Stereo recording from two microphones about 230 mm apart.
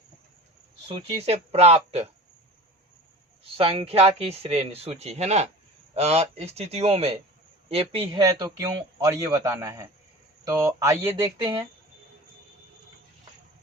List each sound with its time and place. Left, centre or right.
0.9 s speech: right
3.4 s a man's voice: right